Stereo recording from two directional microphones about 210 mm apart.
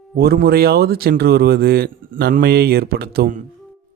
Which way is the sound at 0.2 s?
45° right (ahead or behind).